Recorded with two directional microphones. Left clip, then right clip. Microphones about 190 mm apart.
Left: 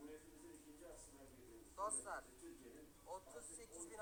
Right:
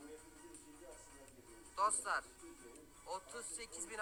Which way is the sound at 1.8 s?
50° right (ahead or behind).